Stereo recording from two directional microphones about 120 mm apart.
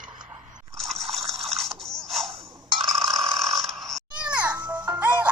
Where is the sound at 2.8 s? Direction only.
30° right (ahead or behind).